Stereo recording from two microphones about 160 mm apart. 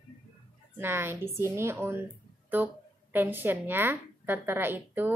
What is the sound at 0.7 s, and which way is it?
A woman's voice, 15° right (ahead or behind).